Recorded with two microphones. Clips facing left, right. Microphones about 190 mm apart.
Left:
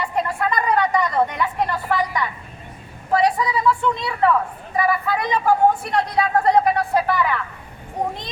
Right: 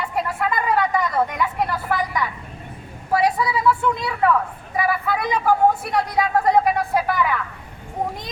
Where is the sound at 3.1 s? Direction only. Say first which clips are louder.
Left 1 dB; 5° right (ahead or behind).